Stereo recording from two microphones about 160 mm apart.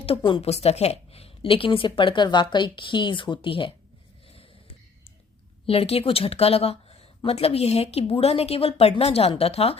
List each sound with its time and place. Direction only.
0.0 s speech: 35° left (ahead or behind)
5.6 s speech: 40° left (ahead or behind)